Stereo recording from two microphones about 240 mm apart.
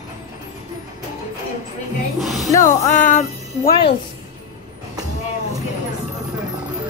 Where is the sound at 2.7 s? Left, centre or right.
Left.